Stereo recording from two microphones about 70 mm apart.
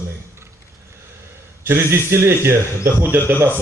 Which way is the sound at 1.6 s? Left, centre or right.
Right.